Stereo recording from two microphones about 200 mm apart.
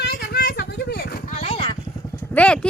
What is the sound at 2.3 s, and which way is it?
Speech, 5° left (ahead or behind).